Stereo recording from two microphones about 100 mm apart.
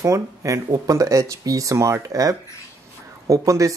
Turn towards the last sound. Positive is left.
turn(degrees=-35)  # may be behind; listen again after turning